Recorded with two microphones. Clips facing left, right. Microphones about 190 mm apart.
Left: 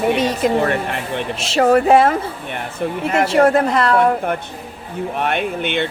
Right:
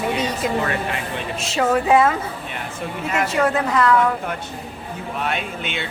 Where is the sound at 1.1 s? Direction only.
60° left (ahead or behind).